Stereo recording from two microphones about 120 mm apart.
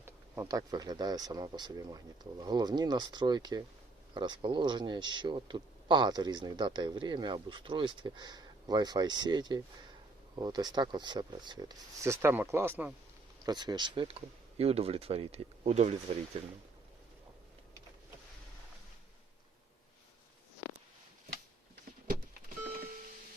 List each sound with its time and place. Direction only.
0.0 s speech: 25° right (ahead or behind)
12.0 s speech: 20° right (ahead or behind)
13.4 s speech: 35° right (ahead or behind)
14.6 s speech: 55° right (ahead or behind)